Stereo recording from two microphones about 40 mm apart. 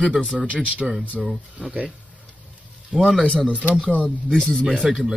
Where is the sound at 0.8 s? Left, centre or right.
Centre.